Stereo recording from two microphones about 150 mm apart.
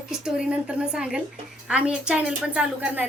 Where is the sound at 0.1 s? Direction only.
5° right (ahead or behind).